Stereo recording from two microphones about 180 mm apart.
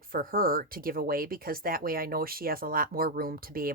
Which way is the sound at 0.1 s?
50° right (ahead or behind).